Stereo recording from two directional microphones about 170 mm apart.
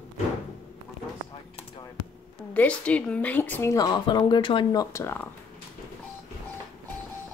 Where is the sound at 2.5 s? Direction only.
10° left (ahead or behind).